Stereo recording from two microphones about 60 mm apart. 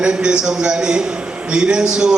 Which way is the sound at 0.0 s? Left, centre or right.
Centre.